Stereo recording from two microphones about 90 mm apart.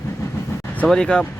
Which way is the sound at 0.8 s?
10° left (ahead or behind).